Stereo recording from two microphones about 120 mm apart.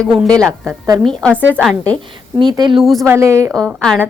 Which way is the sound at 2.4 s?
35° right (ahead or behind).